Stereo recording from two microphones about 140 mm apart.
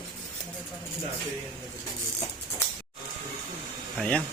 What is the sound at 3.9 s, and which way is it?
Speech, 5° left (ahead or behind).